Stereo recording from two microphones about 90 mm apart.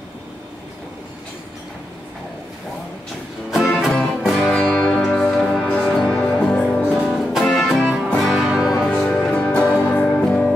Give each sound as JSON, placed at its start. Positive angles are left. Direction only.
{"t": 3.6, "sound": "music", "side_deg": 5}
{"t": 4.6, "sound": "music", "side_deg": 15}
{"t": 6.9, "sound": "music", "side_deg": -5}
{"t": 7.2, "sound": "music", "side_deg": 5}